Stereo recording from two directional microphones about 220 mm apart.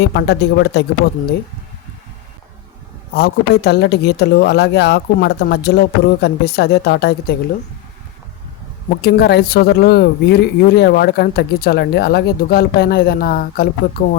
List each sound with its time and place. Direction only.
0.0 s speech: 50° left (ahead or behind)
3.2 s speech: 45° left (ahead or behind)
9.0 s speech: 45° left (ahead or behind)